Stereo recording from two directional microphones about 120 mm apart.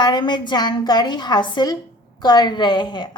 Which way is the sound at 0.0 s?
40° left (ahead or behind).